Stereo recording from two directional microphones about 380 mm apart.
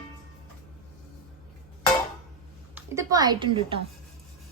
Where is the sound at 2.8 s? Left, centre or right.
Centre.